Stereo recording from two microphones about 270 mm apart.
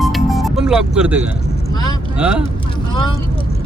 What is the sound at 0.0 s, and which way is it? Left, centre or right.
Music, centre.